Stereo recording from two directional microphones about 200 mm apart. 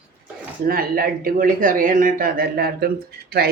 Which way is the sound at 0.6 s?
45° right (ahead or behind).